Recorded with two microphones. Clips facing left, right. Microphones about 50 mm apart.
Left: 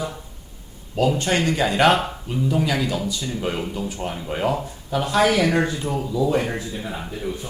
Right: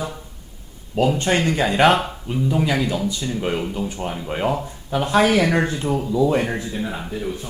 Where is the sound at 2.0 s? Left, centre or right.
Centre.